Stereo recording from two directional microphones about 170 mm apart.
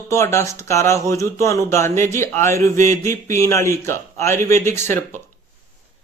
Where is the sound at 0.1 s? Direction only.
15° left (ahead or behind).